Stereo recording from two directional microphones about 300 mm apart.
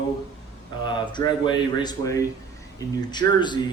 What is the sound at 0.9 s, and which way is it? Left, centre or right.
Speech, centre.